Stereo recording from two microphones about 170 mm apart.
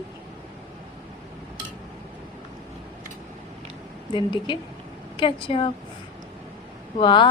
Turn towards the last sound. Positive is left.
turn(degrees=30)  # may be behind; listen again after turning